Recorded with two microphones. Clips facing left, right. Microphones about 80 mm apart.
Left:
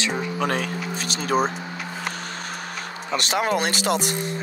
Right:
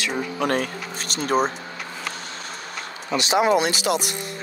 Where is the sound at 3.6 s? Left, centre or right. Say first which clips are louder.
Right 1 dB; left.